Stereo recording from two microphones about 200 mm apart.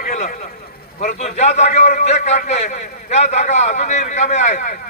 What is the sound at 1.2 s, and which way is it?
A man's voice, 35° left (ahead or behind).